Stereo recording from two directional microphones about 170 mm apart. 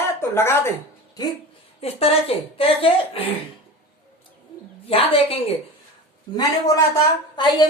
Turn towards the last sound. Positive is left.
turn(degrees=25)  # may be behind; listen again after turning